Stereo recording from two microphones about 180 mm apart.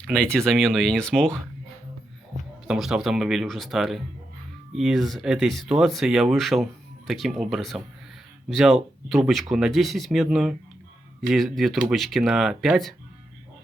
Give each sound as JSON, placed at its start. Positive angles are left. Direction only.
{"t": 0.0, "sound": "speech", "side_deg": 5}
{"t": 2.6, "sound": "speech", "side_deg": -5}